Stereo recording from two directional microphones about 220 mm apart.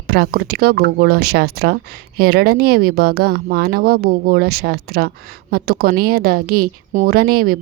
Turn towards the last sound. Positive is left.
turn(degrees=-40)  # may be behind; listen again after turning